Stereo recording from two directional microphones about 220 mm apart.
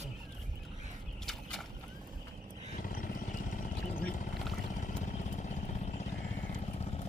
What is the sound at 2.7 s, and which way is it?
Vehicle, 40° left (ahead or behind).